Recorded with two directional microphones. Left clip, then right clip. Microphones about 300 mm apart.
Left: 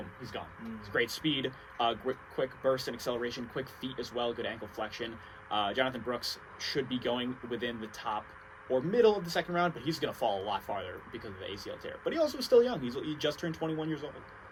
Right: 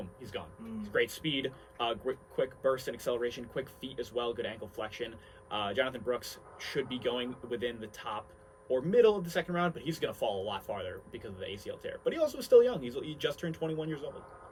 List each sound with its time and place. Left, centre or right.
0.2 s speech: centre